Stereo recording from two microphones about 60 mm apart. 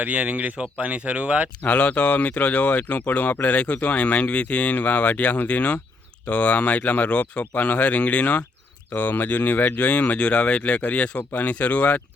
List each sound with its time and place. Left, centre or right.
0.0 s speech: right
1.6 s speech: left